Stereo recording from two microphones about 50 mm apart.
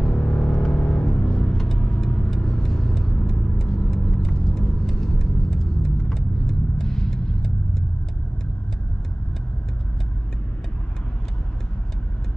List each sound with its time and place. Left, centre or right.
0.0 s music: centre
1.8 s vehicle: centre